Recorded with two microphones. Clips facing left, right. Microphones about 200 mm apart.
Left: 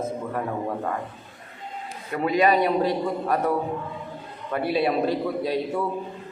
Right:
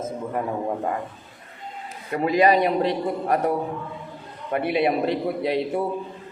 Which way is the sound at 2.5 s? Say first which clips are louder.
Right 1 dB; 20° right (ahead or behind).